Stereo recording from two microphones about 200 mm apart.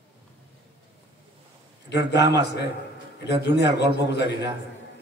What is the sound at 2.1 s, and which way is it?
Speech, 60° left (ahead or behind).